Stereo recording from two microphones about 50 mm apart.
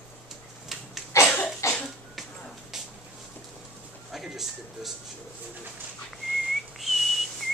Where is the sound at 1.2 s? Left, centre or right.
Left.